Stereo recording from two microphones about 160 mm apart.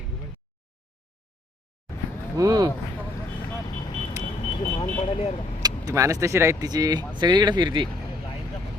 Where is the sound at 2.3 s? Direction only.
20° right (ahead or behind).